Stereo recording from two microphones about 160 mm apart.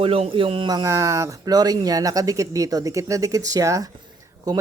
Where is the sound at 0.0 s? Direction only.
35° right (ahead or behind).